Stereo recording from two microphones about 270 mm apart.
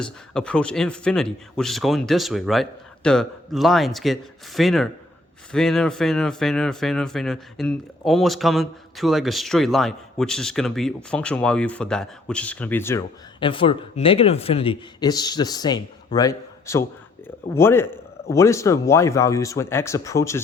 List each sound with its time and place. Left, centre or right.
0.0 s a man's voice: centre
13.4 s a man's voice: centre